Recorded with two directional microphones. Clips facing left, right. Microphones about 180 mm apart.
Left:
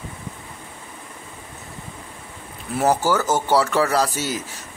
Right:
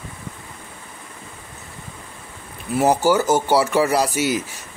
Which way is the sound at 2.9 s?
15° right (ahead or behind).